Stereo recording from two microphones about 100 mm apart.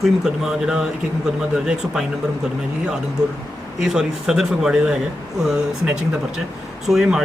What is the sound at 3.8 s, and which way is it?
Speech, 5° right (ahead or behind).